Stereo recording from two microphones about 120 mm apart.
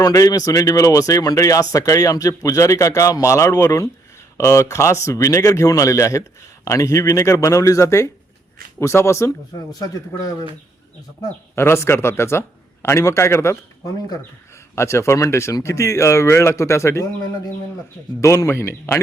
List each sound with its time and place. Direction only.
0.0 s speech: 30° left (ahead or behind)
11.5 s speech: 20° left (ahead or behind)
18.2 s speech: 25° left (ahead or behind)